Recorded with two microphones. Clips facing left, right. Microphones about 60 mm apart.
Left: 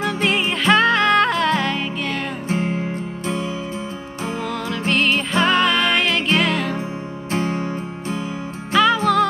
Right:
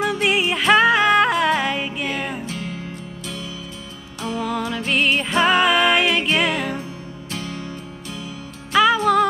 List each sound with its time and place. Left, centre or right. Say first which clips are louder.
0.0 s music: right 1 dB; centre
2.4 s music: left 7 dB; left
4.4 s music: right 3 dB; centre
7.2 s music: left 8 dB; left
8.9 s music: even; centre